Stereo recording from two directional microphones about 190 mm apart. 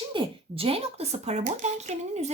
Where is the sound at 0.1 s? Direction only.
25° right (ahead or behind).